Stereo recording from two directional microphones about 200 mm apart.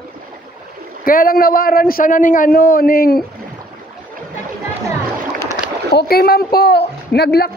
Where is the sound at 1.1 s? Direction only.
45° left (ahead or behind).